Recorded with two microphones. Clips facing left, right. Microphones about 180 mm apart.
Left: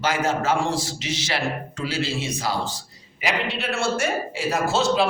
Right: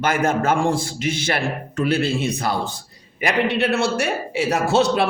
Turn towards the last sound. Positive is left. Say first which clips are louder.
# right 3 dB
turn(degrees=-65)  # may be behind; listen again after turning